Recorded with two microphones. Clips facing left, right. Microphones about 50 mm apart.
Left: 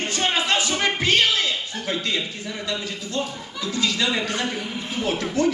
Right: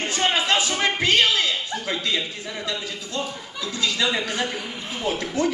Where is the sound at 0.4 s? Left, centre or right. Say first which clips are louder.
Even; right.